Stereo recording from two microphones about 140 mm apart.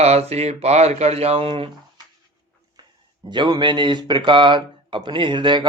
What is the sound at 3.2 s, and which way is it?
A man's voice, 30° right (ahead or behind).